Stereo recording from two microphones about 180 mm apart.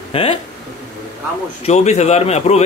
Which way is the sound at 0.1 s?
30° left (ahead or behind).